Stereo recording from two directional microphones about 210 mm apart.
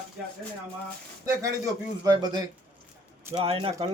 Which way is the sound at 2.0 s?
20° right (ahead or behind).